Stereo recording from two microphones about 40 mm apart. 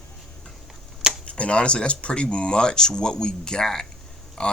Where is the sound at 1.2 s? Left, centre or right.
Left.